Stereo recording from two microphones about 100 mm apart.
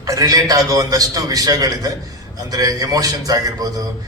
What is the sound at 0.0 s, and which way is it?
A man's voice, 35° right (ahead or behind).